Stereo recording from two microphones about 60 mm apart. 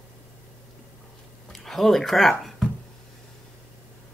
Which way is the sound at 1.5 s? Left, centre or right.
Centre.